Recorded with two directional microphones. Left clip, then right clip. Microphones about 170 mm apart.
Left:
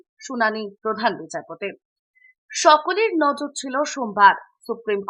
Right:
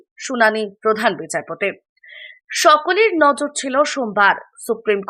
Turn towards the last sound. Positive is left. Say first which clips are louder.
# right 6 dB
turn(degrees=-20)  # may be behind; listen again after turning